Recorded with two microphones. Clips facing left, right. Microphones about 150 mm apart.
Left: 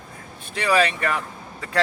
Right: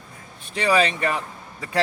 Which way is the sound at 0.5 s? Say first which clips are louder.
Even; 20° right (ahead or behind).